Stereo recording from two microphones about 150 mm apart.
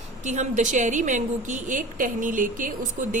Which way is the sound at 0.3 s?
55° right (ahead or behind).